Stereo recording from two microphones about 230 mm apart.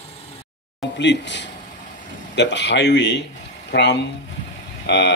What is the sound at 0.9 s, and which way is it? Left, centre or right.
Speech, left.